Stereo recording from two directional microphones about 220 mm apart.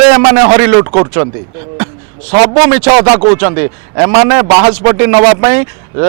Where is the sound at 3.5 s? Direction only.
20° right (ahead or behind).